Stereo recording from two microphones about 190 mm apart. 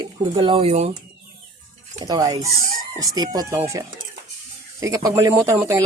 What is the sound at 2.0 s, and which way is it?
Speech, 20° right (ahead or behind).